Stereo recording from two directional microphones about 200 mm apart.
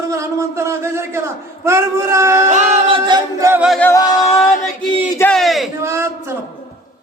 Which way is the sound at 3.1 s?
15° right (ahead or behind).